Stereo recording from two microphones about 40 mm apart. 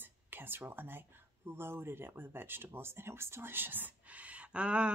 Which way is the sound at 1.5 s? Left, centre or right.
Right.